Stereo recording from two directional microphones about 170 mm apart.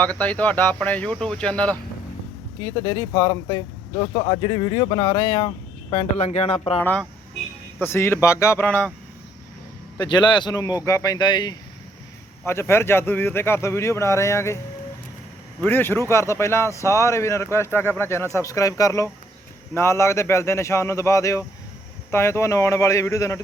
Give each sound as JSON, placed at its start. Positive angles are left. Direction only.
{"t": 0.0, "sound": "speech", "side_deg": 10}
{"t": 2.8, "sound": "a man's voice", "side_deg": 25}
{"t": 6.8, "sound": "speech", "side_deg": 10}
{"t": 10.0, "sound": "a man's voice", "side_deg": 25}
{"t": 12.5, "sound": "speech", "side_deg": 15}
{"t": 15.6, "sound": "speech", "side_deg": 10}